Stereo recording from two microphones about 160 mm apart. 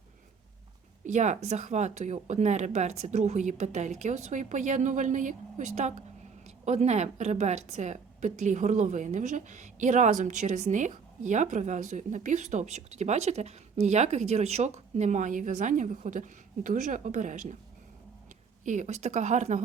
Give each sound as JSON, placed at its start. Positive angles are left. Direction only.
{"t": 1.0, "sound": "a woman's voice", "side_deg": -50}
{"t": 18.6, "sound": "a woman's voice", "side_deg": -50}